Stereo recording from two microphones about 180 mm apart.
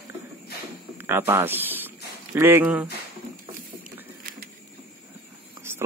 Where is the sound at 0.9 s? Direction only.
10° right (ahead or behind).